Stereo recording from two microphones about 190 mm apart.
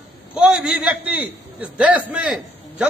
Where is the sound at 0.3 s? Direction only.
5° right (ahead or behind).